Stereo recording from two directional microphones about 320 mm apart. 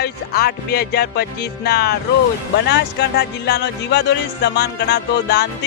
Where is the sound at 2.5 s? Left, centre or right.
Left.